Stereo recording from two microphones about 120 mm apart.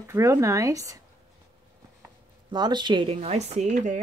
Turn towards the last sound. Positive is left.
turn(degrees=-90)